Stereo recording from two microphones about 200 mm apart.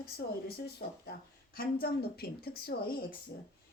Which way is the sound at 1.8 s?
50° left (ahead or behind).